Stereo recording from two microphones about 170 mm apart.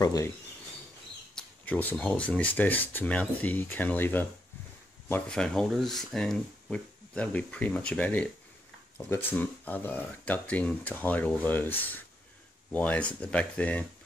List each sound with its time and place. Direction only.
0.0 s speech: 20° left (ahead or behind)
1.3 s speech: 10° left (ahead or behind)
12.7 s speech: 10° left (ahead or behind)